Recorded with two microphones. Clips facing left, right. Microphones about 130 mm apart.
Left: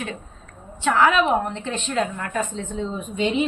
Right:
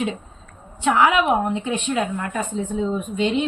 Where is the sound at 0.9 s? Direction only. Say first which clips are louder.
Right 1 dB; 15° right (ahead or behind).